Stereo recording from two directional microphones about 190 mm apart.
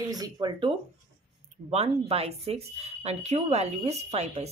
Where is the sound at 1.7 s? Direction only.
35° right (ahead or behind).